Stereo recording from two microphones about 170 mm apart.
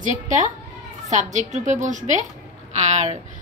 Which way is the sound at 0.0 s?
45° right (ahead or behind).